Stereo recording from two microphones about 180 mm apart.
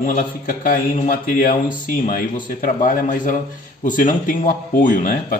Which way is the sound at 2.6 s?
45° left (ahead or behind).